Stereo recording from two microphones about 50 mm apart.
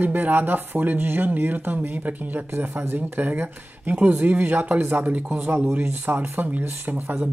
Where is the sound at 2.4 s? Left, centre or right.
Right.